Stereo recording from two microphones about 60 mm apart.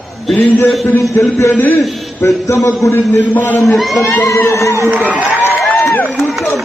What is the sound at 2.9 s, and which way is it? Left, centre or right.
Speech, left.